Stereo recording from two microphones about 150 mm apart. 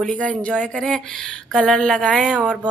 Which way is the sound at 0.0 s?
10° left (ahead or behind).